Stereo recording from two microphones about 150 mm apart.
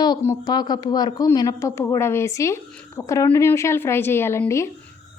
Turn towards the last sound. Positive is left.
turn(degrees=20)  # may be behind; listen again after turning